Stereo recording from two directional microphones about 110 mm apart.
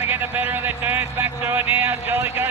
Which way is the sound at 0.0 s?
20° right (ahead or behind).